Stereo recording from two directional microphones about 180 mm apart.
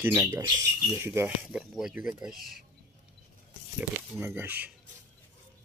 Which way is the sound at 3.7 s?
10° right (ahead or behind).